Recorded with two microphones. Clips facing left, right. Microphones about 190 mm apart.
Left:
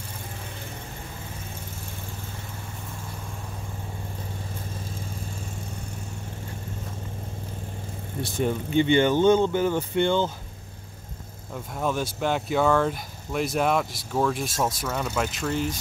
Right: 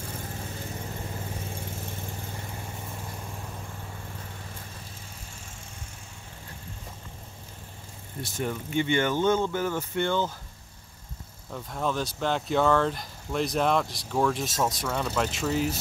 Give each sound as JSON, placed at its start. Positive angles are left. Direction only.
{"t": 8.4, "sound": "speech", "side_deg": 25}
{"t": 11.5, "sound": "speech", "side_deg": 10}